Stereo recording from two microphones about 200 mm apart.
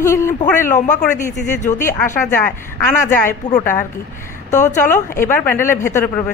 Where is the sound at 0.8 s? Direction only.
40° left (ahead or behind).